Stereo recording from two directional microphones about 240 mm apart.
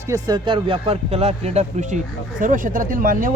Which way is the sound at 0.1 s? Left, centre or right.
Centre.